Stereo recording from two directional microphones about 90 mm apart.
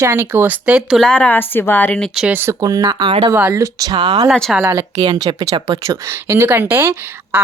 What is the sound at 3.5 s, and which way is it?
Speech, 40° right (ahead or behind).